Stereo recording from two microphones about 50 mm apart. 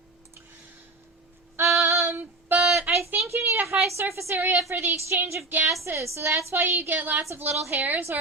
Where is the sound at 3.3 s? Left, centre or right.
Right.